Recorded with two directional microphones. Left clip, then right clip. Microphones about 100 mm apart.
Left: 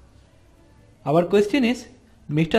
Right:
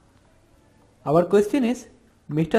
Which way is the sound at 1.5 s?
20° right (ahead or behind).